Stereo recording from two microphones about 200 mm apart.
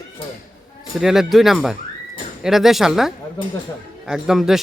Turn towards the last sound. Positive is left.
turn(degrees=0)  # may be behind; listen again after turning